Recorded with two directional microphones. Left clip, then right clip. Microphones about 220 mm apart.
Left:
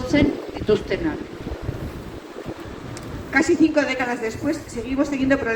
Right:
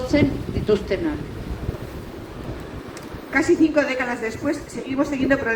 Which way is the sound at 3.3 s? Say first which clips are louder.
Even; 40° right (ahead or behind).